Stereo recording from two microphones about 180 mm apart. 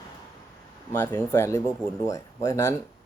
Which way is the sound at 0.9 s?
15° left (ahead or behind).